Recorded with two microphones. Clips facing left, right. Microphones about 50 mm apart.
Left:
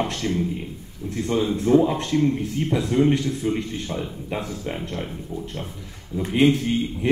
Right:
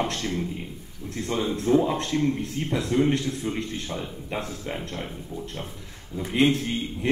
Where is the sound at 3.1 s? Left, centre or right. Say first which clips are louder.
Left 4 dB; centre.